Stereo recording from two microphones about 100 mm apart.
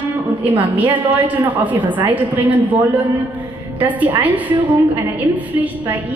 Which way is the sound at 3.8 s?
15° right (ahead or behind).